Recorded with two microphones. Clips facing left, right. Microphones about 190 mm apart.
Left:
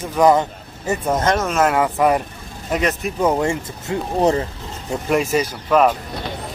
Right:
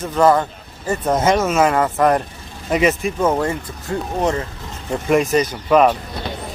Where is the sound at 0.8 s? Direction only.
5° left (ahead or behind).